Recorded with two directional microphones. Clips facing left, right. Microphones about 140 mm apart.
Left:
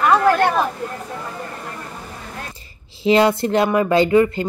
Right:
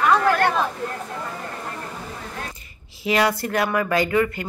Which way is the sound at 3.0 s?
25° left (ahead or behind).